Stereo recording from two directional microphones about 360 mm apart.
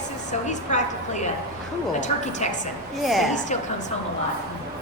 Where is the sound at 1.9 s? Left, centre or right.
Centre.